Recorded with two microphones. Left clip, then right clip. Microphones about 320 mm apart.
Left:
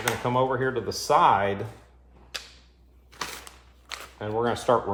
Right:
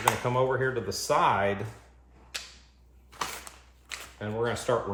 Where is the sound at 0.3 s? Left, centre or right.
Centre.